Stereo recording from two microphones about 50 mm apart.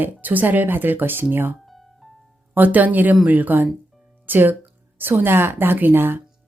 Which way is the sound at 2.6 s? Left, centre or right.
Right.